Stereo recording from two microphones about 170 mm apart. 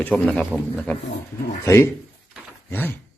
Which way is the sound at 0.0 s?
5° left (ahead or behind).